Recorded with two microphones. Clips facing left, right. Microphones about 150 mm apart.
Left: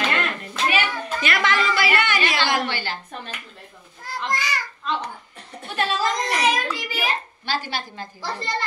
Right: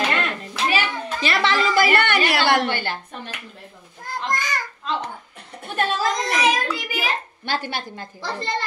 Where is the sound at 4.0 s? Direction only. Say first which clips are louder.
Right 1 dB; 50° right (ahead or behind).